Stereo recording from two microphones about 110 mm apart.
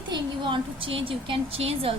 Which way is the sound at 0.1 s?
50° right (ahead or behind).